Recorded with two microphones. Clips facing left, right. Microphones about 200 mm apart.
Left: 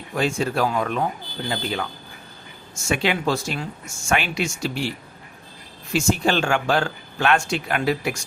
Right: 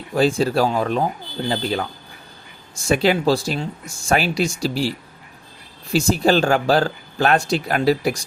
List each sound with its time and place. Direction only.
0.1 s speech: 35° right (ahead or behind)